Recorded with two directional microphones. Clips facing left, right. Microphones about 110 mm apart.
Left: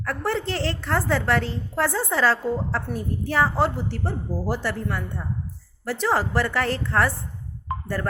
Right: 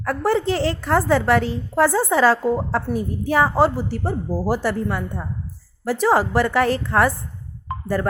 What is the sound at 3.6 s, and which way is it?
Speech, 5° right (ahead or behind).